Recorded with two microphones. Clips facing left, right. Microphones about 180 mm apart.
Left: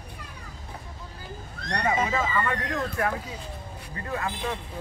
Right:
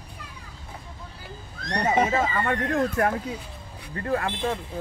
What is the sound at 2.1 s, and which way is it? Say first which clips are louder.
Speech: right 2 dB; 40° right (ahead or behind).